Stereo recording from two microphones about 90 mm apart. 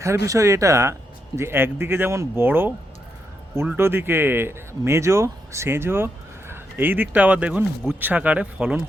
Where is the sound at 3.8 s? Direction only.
25° right (ahead or behind).